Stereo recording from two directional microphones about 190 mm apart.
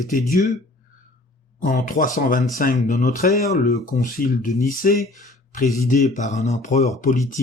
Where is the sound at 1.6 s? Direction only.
45° left (ahead or behind).